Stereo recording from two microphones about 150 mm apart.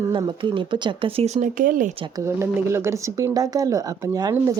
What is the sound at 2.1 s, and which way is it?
Speech, 20° right (ahead or behind).